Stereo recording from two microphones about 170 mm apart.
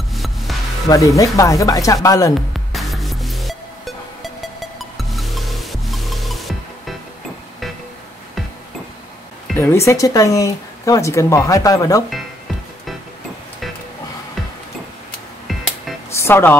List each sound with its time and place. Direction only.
0.1 s music: centre (ahead or behind)
0.8 s speech: 20° left (ahead or behind)
2.7 s music: centre (ahead or behind)
9.6 s speech: 15° left (ahead or behind)
16.2 s speech: 15° left (ahead or behind)